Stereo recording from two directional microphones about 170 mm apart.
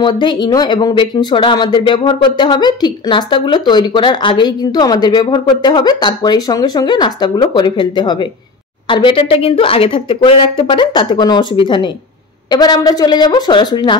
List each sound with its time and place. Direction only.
0.0 s speech: 25° left (ahead or behind)